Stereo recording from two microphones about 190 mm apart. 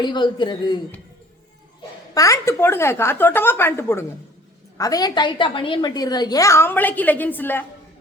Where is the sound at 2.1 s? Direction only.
15° left (ahead or behind).